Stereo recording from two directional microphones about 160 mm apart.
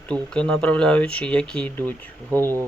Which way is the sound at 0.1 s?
5° left (ahead or behind).